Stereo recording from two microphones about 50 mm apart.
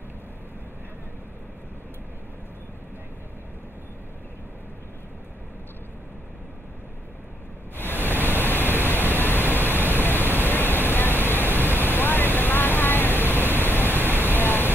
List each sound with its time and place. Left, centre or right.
7.7 s pink noise: left
14.0 s vehicle: left